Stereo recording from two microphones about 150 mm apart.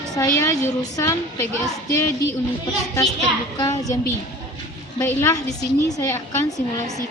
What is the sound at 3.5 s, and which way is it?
Speech, 25° left (ahead or behind).